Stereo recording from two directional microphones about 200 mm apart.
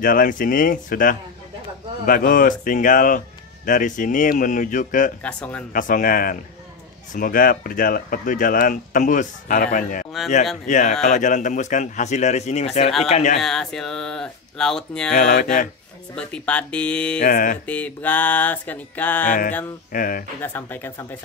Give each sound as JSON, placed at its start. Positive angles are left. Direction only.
{"t": 0.0, "sound": "speech", "side_deg": 45}
{"t": 5.2, "sound": "music", "side_deg": 5}
{"t": 5.7, "sound": "speech", "side_deg": 40}
{"t": 13.4, "sound": "speech", "side_deg": 0}
{"t": 15.1, "sound": "speech", "side_deg": 35}
{"t": 16.2, "sound": "speech", "side_deg": 5}
{"t": 17.2, "sound": "speech", "side_deg": 45}
{"t": 17.6, "sound": "music", "side_deg": 10}
{"t": 19.2, "sound": "speech", "side_deg": 40}
{"t": 20.4, "sound": "music", "side_deg": 10}